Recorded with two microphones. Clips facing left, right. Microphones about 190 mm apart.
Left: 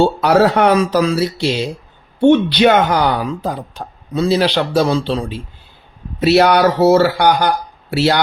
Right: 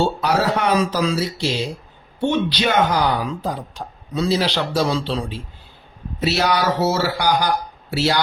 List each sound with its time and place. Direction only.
0.2 s speech: 65° left (ahead or behind)